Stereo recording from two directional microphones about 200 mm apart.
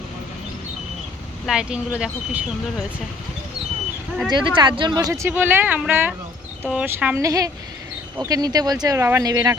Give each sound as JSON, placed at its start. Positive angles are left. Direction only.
{"t": 1.5, "sound": "speech", "side_deg": -5}
{"t": 4.3, "sound": "speech", "side_deg": -25}